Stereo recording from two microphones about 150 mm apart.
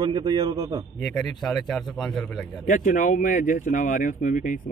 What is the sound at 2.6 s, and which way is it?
Speech, 60° left (ahead or behind).